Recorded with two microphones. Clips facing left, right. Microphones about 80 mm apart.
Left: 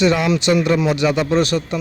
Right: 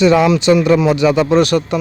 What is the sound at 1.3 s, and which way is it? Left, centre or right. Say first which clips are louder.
Speech: right 5 dB; right.